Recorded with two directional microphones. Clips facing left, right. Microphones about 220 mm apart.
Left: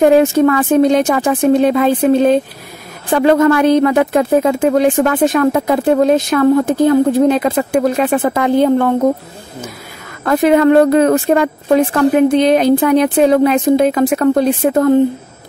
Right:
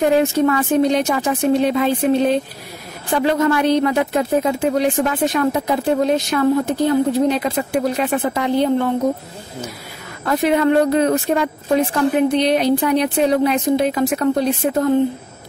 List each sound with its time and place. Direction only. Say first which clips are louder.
0.0 s a woman's voice: left 6 dB; 70° left (ahead or behind)
0.9 s speech: left 5 dB; 50° left (ahead or behind)
10.2 s speech: left 6 dB; 55° left (ahead or behind)
12.0 s speech: left 6 dB; 50° left (ahead or behind)
14.6 s a woman's voice: left 6 dB; 70° left (ahead or behind)